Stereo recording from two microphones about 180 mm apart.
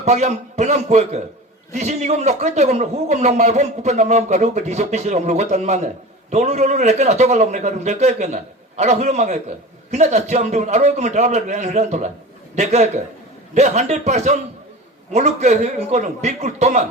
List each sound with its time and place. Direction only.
0.0 s a man's voice: 40° right (ahead or behind)